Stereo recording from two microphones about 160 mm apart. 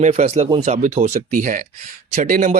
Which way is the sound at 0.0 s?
45° right (ahead or behind).